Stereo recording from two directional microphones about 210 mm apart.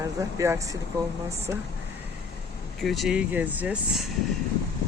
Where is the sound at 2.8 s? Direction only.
5° right (ahead or behind).